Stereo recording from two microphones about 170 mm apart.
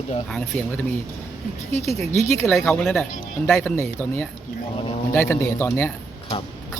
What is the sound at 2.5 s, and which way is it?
Speech, 5° left (ahead or behind).